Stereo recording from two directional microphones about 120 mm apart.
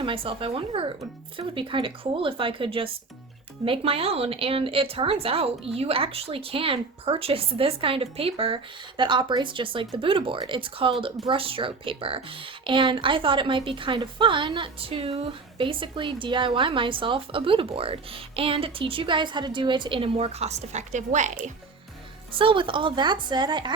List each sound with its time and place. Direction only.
0.0 s a woman's voice: 50° right (ahead or behind)
9.0 s a woman's voice: 40° right (ahead or behind); by 21.5 s 90° right
22.4 s a woman's voice: 45° right (ahead or behind)